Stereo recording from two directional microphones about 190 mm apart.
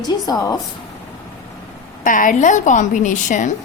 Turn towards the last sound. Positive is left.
turn(degrees=40)  # may be behind; listen again after turning